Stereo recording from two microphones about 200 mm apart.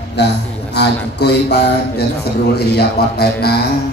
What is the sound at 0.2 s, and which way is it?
A man's voice, 55° left (ahead or behind).